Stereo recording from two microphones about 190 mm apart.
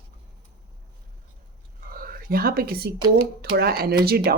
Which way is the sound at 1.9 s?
50° right (ahead or behind).